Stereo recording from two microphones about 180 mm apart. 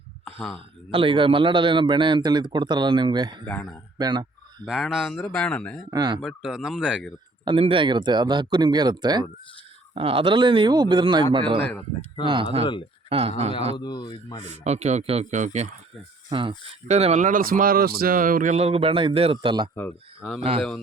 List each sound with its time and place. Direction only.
0.3 s speech: 5° left (ahead or behind)
0.9 s a man's voice: 30° right (ahead or behind)
3.4 s speech: 5° left (ahead or behind)
3.9 s a man's voice: 20° right (ahead or behind)
4.6 s speech: centre (ahead or behind)
5.9 s a man's voice: 25° right (ahead or behind)
6.2 s speech: 5° right (ahead or behind)
7.4 s a man's voice: 30° right (ahead or behind)
13.1 s speech: 35° right (ahead or behind)
13.7 s speech: 25° left (ahead or behind)
14.4 s speech: 40° right (ahead or behind)
16.3 s speech: 30° right (ahead or behind); by 18.5 s 50° right (ahead or behind)
18.5 s speech: 35° right (ahead or behind)
20.2 s speech: centre (ahead or behind)